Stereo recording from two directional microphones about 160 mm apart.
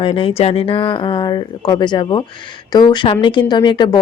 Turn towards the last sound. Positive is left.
turn(degrees=30)  # may be behind; listen again after turning